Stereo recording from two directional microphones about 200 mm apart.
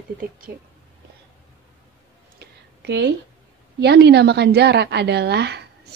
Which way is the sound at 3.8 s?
55° right (ahead or behind).